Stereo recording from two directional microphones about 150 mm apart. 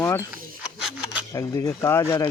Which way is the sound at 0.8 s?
10° right (ahead or behind).